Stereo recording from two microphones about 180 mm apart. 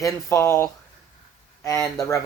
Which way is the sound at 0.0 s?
15° left (ahead or behind).